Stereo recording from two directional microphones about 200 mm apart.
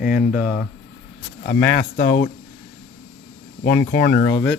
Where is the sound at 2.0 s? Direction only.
40° left (ahead or behind).